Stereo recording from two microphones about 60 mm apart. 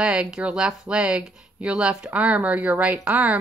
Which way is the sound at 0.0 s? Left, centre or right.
Centre.